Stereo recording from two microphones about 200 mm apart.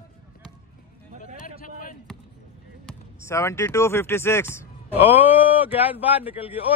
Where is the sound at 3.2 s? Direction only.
15° left (ahead or behind).